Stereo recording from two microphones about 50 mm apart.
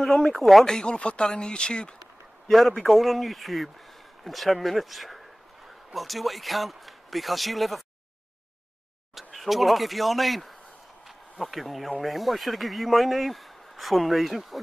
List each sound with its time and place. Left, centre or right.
0.0 s speech: centre
0.7 s speech: centre
2.5 s speech: centre
9.1 s speech: centre
11.1 s a sound: centre
12.0 s speech: centre